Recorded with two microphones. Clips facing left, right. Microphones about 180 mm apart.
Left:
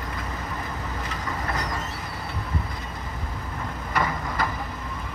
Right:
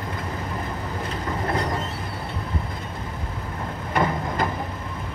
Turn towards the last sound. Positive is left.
turn(degrees=-25)  # may be behind; listen again after turning